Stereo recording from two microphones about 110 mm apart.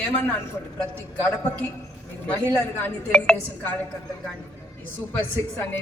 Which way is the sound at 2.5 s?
15° left (ahead or behind).